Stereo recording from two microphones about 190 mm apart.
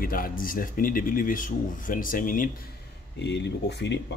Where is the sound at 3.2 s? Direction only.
65° left (ahead or behind).